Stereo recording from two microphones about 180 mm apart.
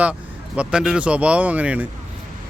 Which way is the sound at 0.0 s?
5° right (ahead or behind).